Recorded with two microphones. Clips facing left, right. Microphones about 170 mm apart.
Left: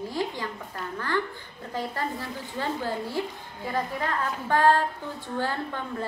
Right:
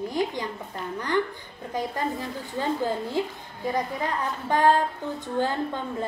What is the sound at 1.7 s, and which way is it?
A woman's voice, 15° right (ahead or behind).